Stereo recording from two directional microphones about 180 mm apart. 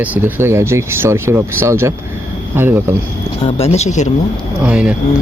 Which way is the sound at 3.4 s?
35° left (ahead or behind).